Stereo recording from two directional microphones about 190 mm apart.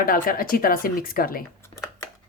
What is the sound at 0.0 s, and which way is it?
A woman's voice, 50° left (ahead or behind).